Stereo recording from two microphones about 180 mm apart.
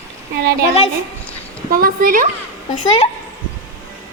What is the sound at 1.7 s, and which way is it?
Speech, 55° right (ahead or behind).